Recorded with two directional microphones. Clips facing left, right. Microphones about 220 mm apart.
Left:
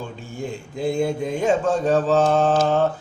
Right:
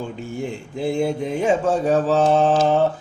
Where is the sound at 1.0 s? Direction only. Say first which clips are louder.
Right 2 dB; 10° right (ahead or behind).